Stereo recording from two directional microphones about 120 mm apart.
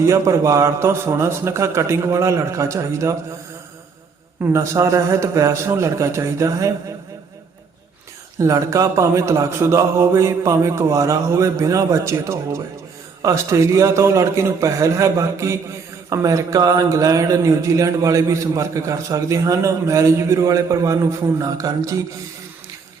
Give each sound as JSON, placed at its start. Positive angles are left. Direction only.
{"t": 0.0, "sound": "a man's voice", "side_deg": -25}
{"t": 4.5, "sound": "a man's voice", "side_deg": -25}
{"t": 8.4, "sound": "a man's voice", "side_deg": -25}